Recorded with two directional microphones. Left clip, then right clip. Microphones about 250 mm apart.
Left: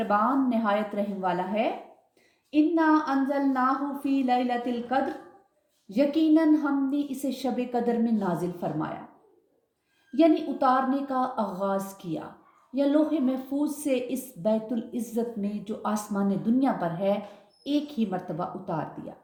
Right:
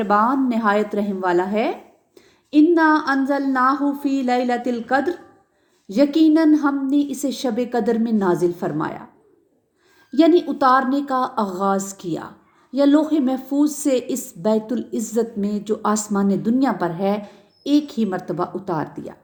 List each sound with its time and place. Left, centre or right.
0.1 s a woman's voice: right
10.1 s a woman's voice: right